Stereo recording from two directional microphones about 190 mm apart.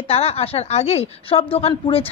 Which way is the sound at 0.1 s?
30° left (ahead or behind).